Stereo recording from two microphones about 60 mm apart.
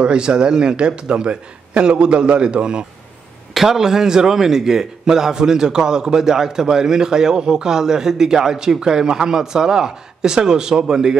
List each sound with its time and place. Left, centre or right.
0.0 s a man's voice: centre